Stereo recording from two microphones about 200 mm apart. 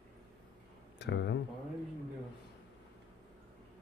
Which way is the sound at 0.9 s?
55° left (ahead or behind).